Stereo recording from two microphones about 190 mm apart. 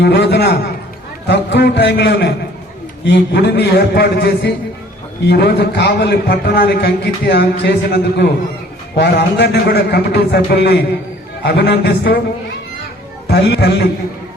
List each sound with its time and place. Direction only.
0.0 s a man's voice: 60° left (ahead or behind)
13.2 s a man's voice: 55° left (ahead or behind)